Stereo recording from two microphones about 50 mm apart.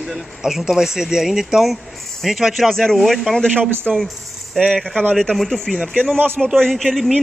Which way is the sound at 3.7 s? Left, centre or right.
Right.